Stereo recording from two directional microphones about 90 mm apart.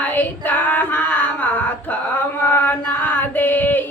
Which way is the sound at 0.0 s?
20° left (ahead or behind).